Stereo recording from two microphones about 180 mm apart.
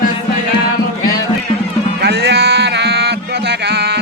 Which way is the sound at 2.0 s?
65° right (ahead or behind).